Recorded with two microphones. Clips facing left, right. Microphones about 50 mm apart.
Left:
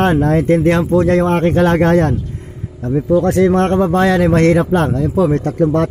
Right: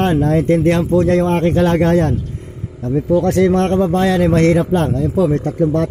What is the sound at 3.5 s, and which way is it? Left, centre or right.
Speech, left.